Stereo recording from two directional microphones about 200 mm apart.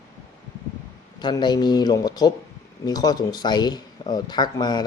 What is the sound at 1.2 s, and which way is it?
Speech, 20° left (ahead or behind).